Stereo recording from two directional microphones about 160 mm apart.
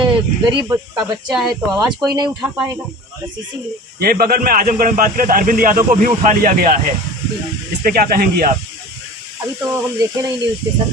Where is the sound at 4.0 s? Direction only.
70° right (ahead or behind).